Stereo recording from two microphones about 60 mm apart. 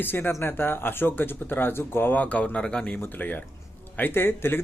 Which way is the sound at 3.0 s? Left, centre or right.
Left.